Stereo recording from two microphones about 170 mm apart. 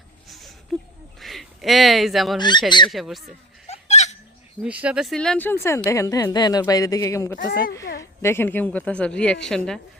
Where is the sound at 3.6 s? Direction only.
40° left (ahead or behind).